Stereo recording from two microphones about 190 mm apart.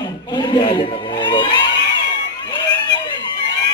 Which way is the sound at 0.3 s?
20° left (ahead or behind).